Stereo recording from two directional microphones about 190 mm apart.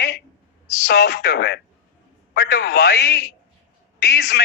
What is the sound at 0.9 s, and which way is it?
A man's voice, 60° left (ahead or behind).